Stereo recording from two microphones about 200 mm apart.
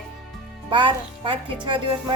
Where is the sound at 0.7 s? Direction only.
25° right (ahead or behind).